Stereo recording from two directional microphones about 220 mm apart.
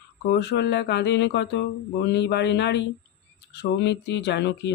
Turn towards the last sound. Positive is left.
turn(degrees=50)  # may be behind; listen again after turning